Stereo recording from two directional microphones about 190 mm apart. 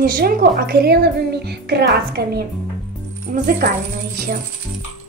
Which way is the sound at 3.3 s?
40° right (ahead or behind).